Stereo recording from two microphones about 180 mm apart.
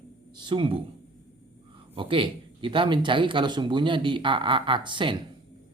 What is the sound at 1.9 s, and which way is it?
Speech, 30° right (ahead or behind).